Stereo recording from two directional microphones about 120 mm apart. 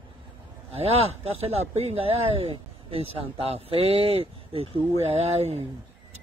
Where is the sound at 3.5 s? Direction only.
55° right (ahead or behind).